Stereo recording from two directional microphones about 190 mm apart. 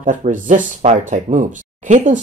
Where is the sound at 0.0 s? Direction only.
40° right (ahead or behind).